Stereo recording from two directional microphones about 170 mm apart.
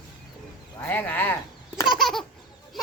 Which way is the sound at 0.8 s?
10° left (ahead or behind).